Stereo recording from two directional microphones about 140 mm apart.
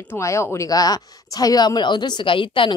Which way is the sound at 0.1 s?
20° left (ahead or behind).